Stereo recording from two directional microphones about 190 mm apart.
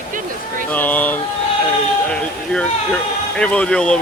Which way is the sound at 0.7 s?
10° left (ahead or behind).